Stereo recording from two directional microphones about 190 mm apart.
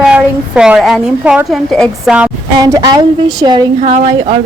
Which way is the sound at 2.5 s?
20° right (ahead or behind).